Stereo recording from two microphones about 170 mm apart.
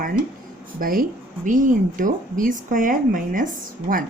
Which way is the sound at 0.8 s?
55° right (ahead or behind).